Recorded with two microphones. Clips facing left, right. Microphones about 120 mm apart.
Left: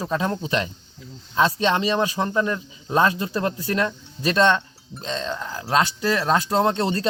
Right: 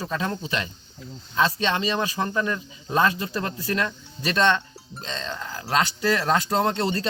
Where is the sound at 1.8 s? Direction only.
15° left (ahead or behind).